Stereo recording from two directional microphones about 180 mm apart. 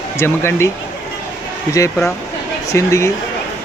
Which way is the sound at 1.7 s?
15° left (ahead or behind).